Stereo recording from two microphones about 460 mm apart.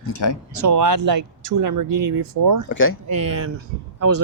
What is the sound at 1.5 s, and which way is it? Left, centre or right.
Speech, right.